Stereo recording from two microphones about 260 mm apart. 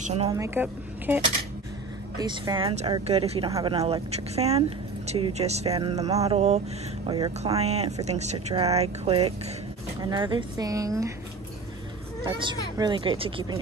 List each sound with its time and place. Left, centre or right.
0.0 s speech: right
0.3 s speech: centre
12.3 s speech: centre